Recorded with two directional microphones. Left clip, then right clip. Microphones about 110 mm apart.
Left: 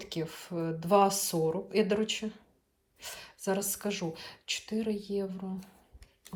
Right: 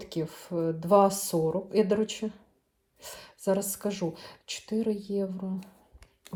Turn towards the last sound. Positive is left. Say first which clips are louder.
# right 3 dB
turn(degrees=-45)  # may be behind; listen again after turning